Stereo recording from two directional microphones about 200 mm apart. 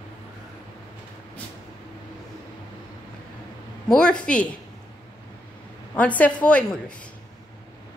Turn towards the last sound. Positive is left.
turn(degrees=5)  # may be behind; listen again after turning